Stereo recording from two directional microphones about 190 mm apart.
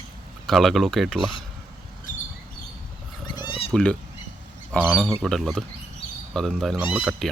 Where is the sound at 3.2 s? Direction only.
25° left (ahead or behind).